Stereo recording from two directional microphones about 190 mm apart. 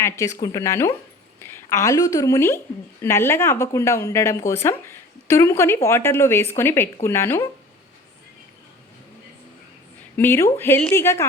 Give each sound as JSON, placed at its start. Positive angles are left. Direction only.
{"t": 0.0, "sound": "a woman's voice", "side_deg": 15}
{"t": 10.2, "sound": "a woman's voice", "side_deg": 15}